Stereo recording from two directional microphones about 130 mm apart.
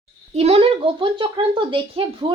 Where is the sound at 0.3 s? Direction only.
50° right (ahead or behind).